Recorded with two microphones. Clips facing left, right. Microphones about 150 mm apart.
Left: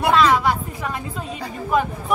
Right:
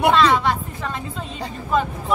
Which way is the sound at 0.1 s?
10° left (ahead or behind).